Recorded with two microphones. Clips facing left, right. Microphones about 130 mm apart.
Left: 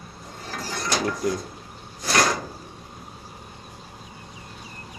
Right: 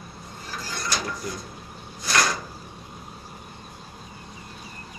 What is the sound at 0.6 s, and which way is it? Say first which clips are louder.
Mechanisms: left 3 dB; 75° left (ahead or behind).